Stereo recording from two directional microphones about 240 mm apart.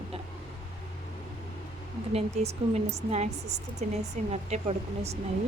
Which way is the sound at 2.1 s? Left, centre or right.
Right.